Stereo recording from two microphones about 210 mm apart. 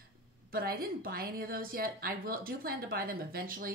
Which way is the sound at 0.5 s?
45° right (ahead or behind).